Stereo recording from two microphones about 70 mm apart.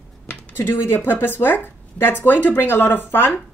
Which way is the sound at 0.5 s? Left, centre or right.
Left.